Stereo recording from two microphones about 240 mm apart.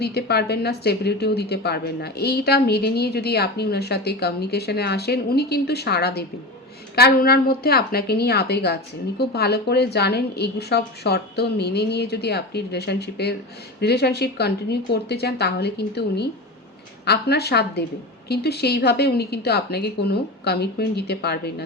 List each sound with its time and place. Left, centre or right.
0.0 s a woman's voice: left